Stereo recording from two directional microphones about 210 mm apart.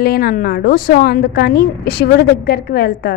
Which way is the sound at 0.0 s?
45° left (ahead or behind).